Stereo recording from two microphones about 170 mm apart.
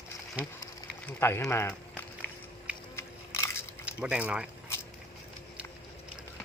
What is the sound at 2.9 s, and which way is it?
Crushing, 15° left (ahead or behind).